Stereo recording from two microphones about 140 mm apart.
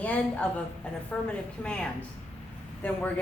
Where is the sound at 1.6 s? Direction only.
5° left (ahead or behind).